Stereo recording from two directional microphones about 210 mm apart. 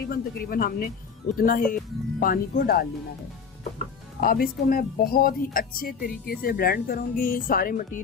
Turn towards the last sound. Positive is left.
turn(degrees=40)  # may be behind; listen again after turning